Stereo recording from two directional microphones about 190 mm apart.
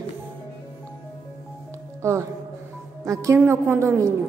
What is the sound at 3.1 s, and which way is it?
A woman's voice, 15° right (ahead or behind).